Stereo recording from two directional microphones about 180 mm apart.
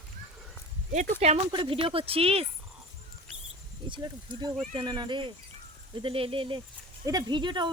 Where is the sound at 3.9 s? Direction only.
25° right (ahead or behind).